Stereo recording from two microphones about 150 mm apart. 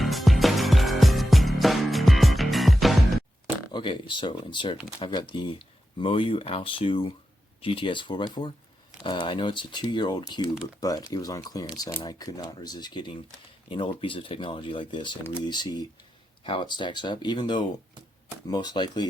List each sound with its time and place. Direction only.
0.0 s music: centre (ahead or behind)
3.7 s speech: 30° left (ahead or behind)